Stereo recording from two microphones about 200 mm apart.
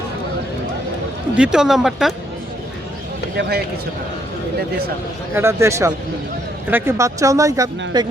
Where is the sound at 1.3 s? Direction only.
5° right (ahead or behind).